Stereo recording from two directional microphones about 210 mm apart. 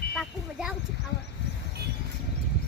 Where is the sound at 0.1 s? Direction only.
Centre (ahead or behind).